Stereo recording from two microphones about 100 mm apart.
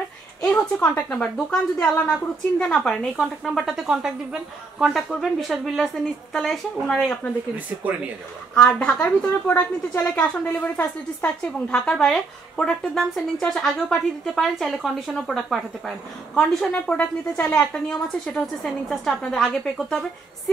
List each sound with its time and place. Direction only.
0.4 s a woman's voice: 10° left (ahead or behind)
7.5 s speech: 15° right (ahead or behind)
8.7 s a woman's voice: 10° left (ahead or behind)